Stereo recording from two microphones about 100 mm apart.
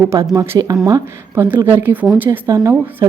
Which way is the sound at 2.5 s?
30° right (ahead or behind).